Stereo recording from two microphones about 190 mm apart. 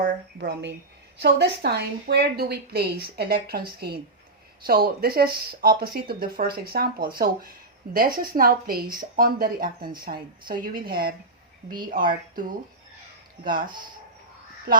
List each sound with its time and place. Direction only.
0.0 s a woman's voice: 60° right (ahead or behind)